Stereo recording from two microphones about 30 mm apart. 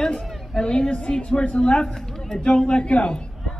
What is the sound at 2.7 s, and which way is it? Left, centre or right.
Speech, left.